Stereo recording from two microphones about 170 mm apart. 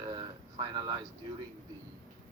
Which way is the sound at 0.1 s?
25° right (ahead or behind).